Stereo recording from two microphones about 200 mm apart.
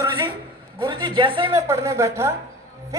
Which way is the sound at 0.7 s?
25° right (ahead or behind).